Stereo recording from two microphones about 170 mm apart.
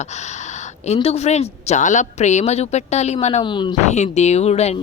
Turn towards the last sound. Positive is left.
turn(degrees=40)  # may be behind; listen again after turning